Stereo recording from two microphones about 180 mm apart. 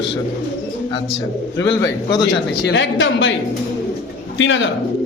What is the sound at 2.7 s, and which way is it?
Speech, 90° left.